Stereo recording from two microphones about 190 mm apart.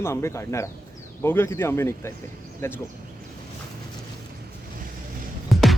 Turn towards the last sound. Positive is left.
turn(degrees=0)  # may be behind; listen again after turning